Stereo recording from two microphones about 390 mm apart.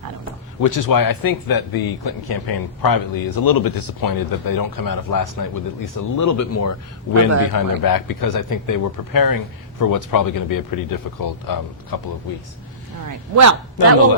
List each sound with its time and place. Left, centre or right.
0.6 s speech: left
7.5 s speech: left
13.3 s a man's voice: right